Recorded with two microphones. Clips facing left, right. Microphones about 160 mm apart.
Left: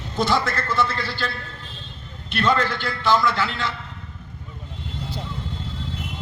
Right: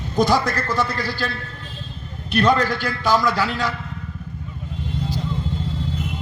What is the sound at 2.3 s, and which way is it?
A man's voice, 40° right (ahead or behind).